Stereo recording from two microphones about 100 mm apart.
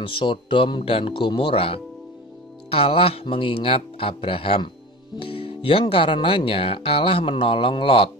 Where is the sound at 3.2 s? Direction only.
60° left (ahead or behind).